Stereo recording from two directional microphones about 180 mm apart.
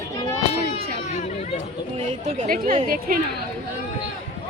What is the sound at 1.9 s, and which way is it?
A woman's voice, 40° right (ahead or behind).